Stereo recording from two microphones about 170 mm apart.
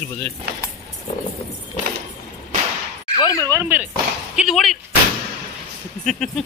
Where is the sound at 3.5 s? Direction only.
10° right (ahead or behind).